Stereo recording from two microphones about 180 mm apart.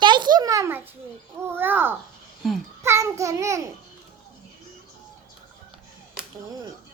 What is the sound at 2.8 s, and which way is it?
Speech, 15° right (ahead or behind).